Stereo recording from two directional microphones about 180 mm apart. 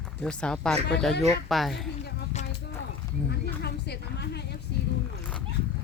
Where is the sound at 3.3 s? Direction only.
65° left (ahead or behind).